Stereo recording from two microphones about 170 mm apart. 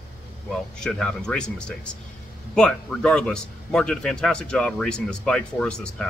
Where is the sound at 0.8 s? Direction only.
5° left (ahead or behind).